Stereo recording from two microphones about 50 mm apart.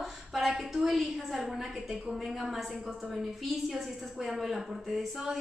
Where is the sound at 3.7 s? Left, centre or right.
Centre.